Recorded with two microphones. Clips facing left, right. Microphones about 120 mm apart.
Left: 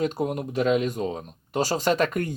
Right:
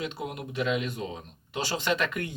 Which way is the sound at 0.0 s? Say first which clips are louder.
Left 9 dB; 45° left (ahead or behind).